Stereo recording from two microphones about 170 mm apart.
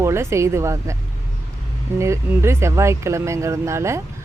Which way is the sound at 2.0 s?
15° right (ahead or behind).